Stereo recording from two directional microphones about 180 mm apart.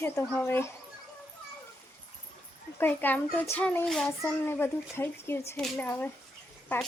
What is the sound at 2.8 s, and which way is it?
Speech, 10° left (ahead or behind).